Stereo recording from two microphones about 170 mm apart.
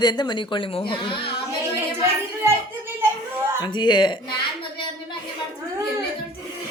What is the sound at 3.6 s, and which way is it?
Speech, 25° left (ahead or behind).